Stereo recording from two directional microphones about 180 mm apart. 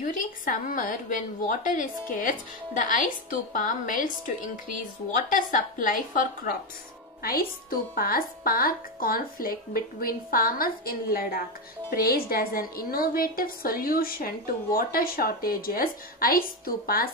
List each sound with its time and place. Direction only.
0.0 s speech: 50° left (ahead or behind)
5.3 s a woman's voice: 50° left (ahead or behind)